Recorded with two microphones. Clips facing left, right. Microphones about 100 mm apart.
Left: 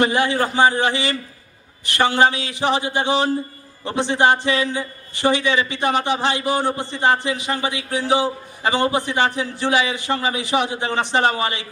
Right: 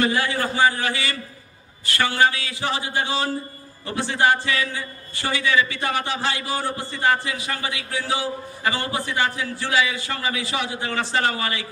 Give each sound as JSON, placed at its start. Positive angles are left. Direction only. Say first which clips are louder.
{"t": 0.0, "sound": "a man's voice", "louder": "left 4 dB", "side_deg": 20}